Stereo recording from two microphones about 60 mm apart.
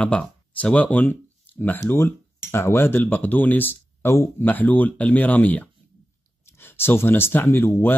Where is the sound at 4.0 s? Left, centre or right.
Left.